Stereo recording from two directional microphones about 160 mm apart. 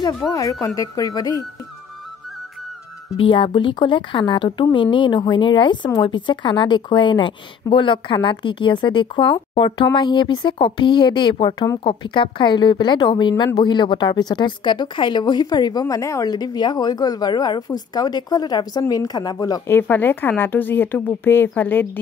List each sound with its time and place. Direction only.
0.3 s speech: 20° left (ahead or behind)
3.2 s a woman's voice: 35° left (ahead or behind)
19.8 s speech: 10° left (ahead or behind)